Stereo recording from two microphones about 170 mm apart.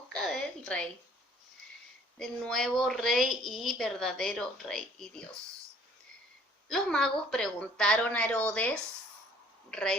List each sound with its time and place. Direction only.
0.1 s a sound: 5° left (ahead or behind)
2.1 s a woman's voice: centre (ahead or behind)
6.7 s a woman's voice: 5° left (ahead or behind)